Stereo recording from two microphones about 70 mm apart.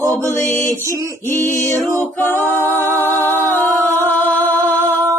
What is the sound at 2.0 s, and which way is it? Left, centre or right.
Singing, left.